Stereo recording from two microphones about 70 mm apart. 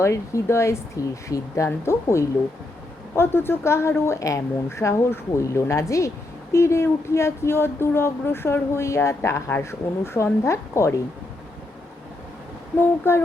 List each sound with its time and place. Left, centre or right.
0.0 s a woman's voice: left
13.1 s speech: left